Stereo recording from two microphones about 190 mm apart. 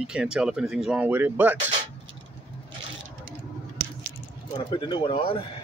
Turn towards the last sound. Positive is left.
turn(degrees=30)  # may be behind; listen again after turning